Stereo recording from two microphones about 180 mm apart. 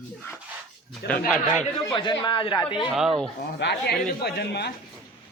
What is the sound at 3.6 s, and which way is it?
Speech, 70° left (ahead or behind).